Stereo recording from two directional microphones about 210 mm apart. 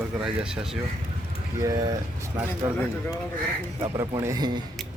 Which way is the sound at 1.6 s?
15° right (ahead or behind).